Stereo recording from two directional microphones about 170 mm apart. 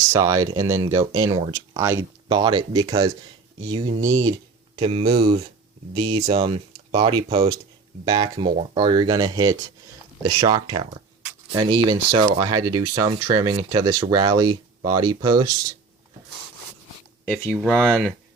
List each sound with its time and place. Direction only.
0.1 s speech: 20° right (ahead or behind)
17.2 s speech: 10° left (ahead or behind)